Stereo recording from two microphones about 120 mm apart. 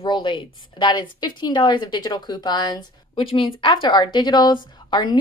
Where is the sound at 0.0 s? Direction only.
40° left (ahead or behind).